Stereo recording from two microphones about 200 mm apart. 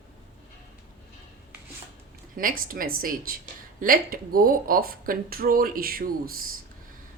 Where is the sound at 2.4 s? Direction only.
45° right (ahead or behind).